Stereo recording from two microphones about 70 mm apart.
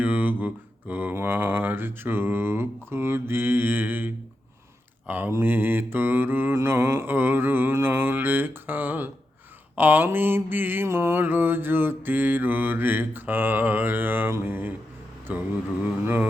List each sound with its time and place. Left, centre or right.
0.0 s mantra: right
5.0 s speech: right
5.3 s mantra: right
15.3 s speech: right